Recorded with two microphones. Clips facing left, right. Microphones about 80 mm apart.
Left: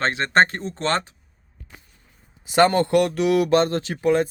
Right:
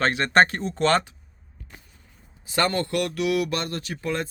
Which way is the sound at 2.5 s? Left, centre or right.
Left.